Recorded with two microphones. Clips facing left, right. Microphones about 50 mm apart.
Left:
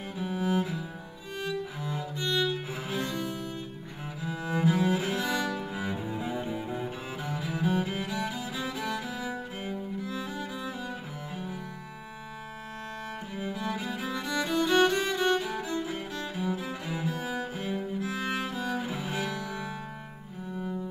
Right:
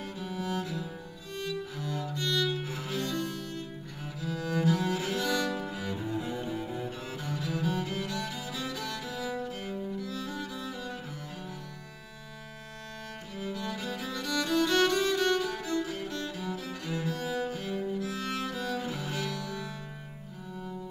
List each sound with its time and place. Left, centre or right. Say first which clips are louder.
0.2 s music: left 6 dB; left
5.6 s cello: left 1 dB; centre
13.4 s music: left 2 dB; centre